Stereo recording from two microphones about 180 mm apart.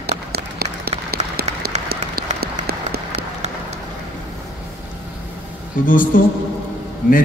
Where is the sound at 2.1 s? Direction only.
60° right (ahead or behind).